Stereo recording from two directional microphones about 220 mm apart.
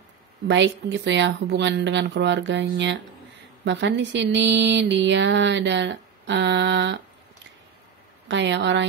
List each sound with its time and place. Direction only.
0.5 s speech: 55° right (ahead or behind)
3.6 s speech: 55° right (ahead or behind)
8.3 s speech: 55° right (ahead or behind)